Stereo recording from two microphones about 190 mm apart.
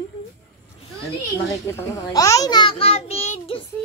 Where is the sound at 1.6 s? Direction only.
15° left (ahead or behind); by 3.6 s 35° left (ahead or behind).